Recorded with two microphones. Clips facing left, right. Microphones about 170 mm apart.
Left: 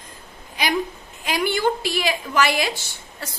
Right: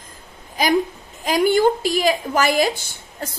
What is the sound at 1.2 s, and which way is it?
A woman's voice, 45° right (ahead or behind).